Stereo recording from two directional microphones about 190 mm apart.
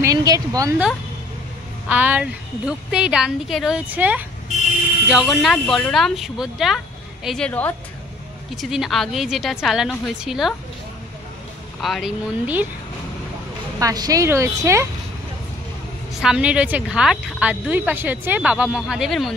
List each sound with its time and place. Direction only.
0.0 s a woman's voice: 20° right (ahead or behind)
1.9 s a woman's voice: 10° right (ahead or behind)
11.8 s a woman's voice: centre (ahead or behind)
13.7 s speech: 20° right (ahead or behind)
16.2 s a woman's voice: 5° right (ahead or behind)